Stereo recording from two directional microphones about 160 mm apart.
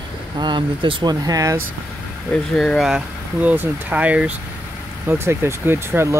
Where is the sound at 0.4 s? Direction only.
30° right (ahead or behind).